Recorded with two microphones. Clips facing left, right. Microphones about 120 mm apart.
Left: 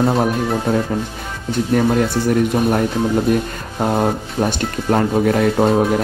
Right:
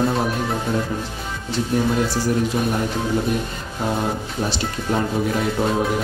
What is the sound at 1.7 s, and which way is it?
Speech, 60° left (ahead or behind).